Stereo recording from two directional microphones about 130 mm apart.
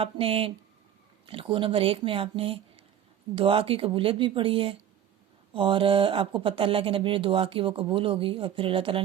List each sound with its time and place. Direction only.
0.0 s speech: 45° right (ahead or behind)